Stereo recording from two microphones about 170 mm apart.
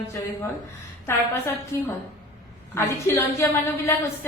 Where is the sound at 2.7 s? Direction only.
15° left (ahead or behind).